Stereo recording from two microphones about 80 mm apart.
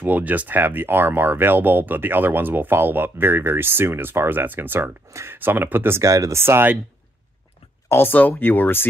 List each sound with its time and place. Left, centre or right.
0.0 s speech: right
6.0 s speech: right
7.9 s speech: left